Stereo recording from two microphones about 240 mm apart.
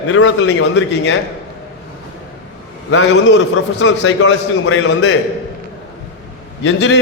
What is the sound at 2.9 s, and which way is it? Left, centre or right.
A man's voice, left.